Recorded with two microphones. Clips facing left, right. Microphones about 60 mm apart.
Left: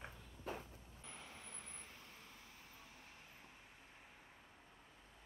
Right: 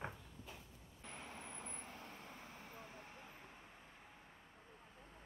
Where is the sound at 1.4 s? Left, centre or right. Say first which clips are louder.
Right 5 dB; right.